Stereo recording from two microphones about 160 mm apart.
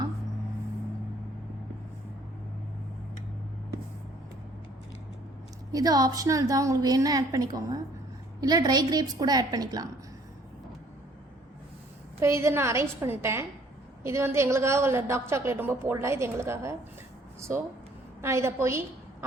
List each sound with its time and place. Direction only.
5.7 s a woman's voice: 25° right (ahead or behind)
12.2 s a woman's voice: 15° right (ahead or behind)
18.2 s a woman's voice: 15° right (ahead or behind)